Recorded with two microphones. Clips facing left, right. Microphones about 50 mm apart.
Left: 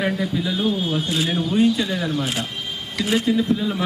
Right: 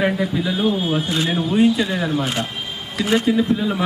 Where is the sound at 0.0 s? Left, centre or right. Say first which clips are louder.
Right 3 dB; centre.